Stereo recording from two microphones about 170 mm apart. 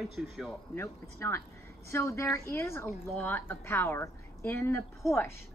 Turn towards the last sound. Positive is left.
turn(degrees=0)  # may be behind; listen again after turning